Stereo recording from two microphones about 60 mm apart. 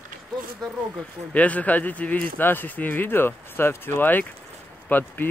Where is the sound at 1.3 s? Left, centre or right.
Left.